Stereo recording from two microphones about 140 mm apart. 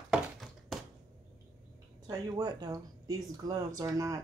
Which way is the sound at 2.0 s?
30° right (ahead or behind).